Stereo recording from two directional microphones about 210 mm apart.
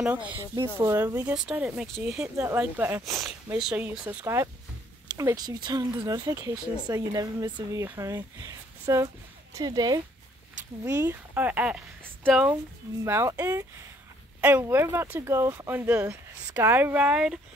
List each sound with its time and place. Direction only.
0.0 s speech: 5° right (ahead or behind)